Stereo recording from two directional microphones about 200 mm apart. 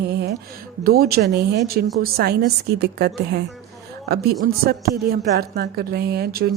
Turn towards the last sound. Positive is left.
turn(degrees=-50)  # may be behind; listen again after turning